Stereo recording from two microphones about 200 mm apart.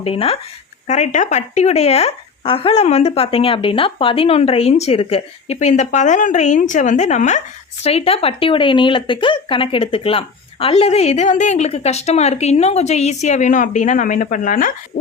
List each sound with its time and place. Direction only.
0.0 s speech: 30° left (ahead or behind)